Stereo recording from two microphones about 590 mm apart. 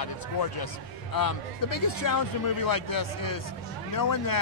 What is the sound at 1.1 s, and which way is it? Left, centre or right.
A man's voice, left.